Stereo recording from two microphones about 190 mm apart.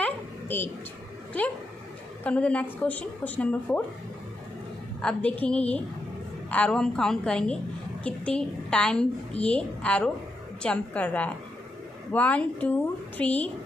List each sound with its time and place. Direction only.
0.0 s a sound: 10° left (ahead or behind)
2.2 s a woman's voice: 5° left (ahead or behind)
5.4 s a woman's voice: 5° left (ahead or behind)